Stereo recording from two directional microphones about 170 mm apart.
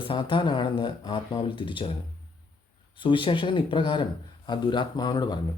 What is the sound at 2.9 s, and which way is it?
A man's voice, 30° left (ahead or behind).